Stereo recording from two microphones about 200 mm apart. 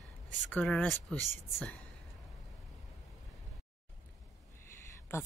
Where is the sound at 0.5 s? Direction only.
5° left (ahead or behind).